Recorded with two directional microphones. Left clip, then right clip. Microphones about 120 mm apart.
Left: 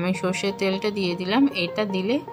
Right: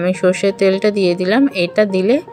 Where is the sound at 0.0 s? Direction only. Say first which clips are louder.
Right 11 dB; 20° right (ahead or behind).